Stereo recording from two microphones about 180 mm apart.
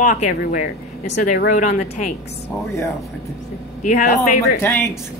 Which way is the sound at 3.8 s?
45° left (ahead or behind).